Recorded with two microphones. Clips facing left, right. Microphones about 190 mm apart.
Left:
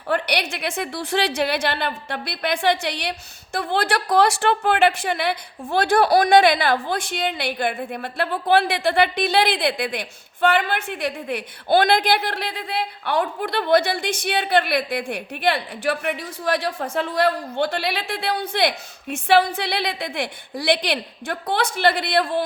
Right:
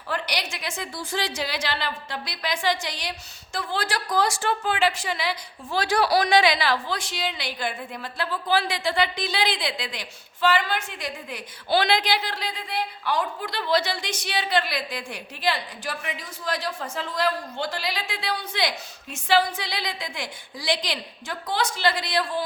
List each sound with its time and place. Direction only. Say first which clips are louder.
0.1 s a woman's voice: left 7 dB; 60° left (ahead or behind)